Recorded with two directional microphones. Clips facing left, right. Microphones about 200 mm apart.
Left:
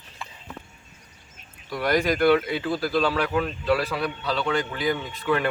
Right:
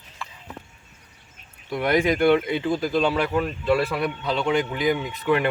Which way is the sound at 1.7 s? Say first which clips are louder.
Right 2 dB; 20° right (ahead or behind).